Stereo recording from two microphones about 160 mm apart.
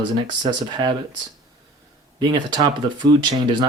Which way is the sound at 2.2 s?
30° right (ahead or behind).